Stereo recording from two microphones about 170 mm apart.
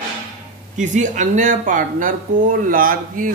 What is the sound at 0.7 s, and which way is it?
Speech, 45° right (ahead or behind).